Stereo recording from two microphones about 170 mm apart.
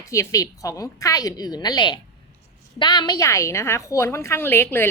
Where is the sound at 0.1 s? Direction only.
20° left (ahead or behind).